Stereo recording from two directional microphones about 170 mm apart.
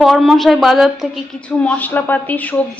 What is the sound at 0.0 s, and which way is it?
A woman's voice, centre (ahead or behind).